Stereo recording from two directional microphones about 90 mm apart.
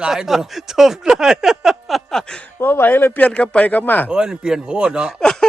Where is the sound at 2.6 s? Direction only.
25° left (ahead or behind).